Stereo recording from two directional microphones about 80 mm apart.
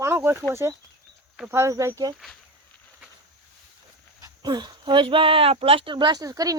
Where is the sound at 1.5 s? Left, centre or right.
Right.